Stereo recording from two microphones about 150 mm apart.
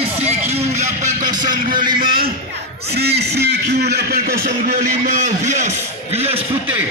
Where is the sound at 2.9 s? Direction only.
90° right; by 6.4 s 45° right (ahead or behind).